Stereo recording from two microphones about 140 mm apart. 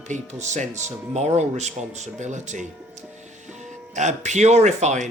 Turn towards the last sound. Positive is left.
turn(degrees=-55)  # may be behind; listen again after turning